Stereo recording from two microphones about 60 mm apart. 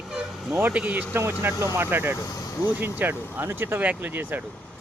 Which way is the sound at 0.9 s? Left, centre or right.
Right.